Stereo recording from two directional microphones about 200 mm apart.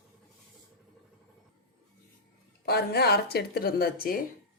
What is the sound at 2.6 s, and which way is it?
A woman's voice, 50° left (ahead or behind).